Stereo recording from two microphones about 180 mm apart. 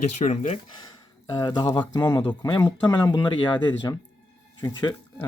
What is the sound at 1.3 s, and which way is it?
Speech, 25° left (ahead or behind).